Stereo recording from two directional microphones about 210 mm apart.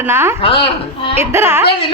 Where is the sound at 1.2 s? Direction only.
10° right (ahead or behind).